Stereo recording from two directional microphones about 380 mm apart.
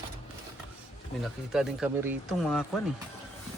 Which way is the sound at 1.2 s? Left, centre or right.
Centre.